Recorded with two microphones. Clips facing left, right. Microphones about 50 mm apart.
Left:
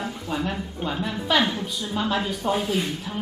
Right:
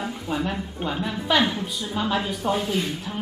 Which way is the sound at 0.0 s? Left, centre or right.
Centre.